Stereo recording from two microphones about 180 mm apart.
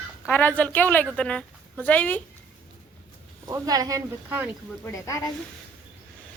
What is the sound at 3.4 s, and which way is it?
Speech, 20° right (ahead or behind).